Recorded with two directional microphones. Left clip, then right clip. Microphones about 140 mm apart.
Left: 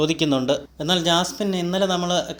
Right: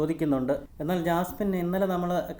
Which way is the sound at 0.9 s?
55° left (ahead or behind).